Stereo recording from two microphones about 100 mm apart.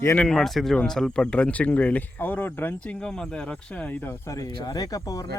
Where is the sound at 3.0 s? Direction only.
10° left (ahead or behind).